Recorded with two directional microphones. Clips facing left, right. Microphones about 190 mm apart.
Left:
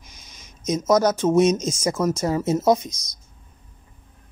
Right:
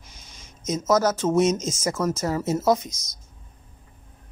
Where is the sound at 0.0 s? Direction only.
15° left (ahead or behind).